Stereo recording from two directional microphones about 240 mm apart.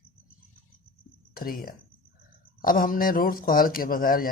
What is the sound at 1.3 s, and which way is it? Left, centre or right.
A man's voice, left.